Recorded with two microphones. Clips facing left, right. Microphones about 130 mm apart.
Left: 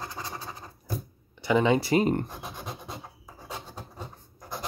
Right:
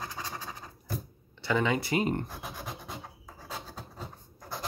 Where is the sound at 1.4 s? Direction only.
20° left (ahead or behind).